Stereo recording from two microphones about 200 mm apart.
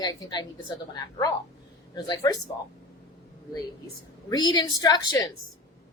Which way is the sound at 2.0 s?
20° left (ahead or behind).